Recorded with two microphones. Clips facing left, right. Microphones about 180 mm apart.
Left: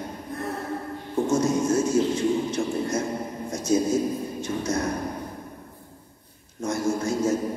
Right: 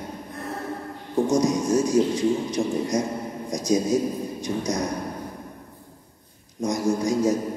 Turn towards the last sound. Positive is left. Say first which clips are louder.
# right 2 dB
turn(degrees=-15)  # may be behind; listen again after turning